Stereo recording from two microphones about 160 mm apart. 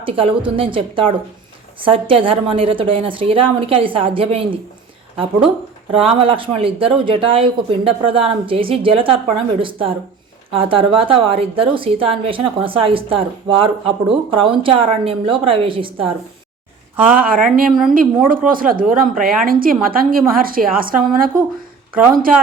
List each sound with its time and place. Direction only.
0.0 s a woman's voice: 35° right (ahead or behind)
17.2 s a woman's voice: 60° right (ahead or behind)
17.7 s a woman's voice: centre (ahead or behind)
18.3 s a woman's voice: 60° right (ahead or behind)